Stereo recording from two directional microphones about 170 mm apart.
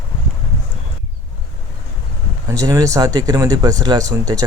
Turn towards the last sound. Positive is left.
turn(degrees=-20)  # may be behind; listen again after turning